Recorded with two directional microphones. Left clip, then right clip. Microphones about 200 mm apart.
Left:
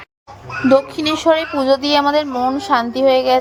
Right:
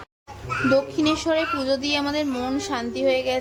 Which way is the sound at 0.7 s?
20° left (ahead or behind).